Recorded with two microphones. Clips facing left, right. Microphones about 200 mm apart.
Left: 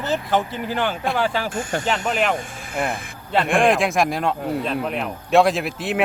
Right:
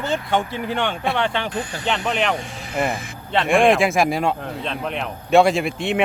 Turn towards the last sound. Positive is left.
turn(degrees=5)  # may be behind; listen again after turning